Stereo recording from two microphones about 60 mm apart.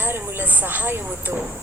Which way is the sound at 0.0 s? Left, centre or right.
Right.